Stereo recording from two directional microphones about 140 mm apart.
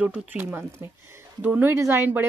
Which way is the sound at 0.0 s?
10° right (ahead or behind).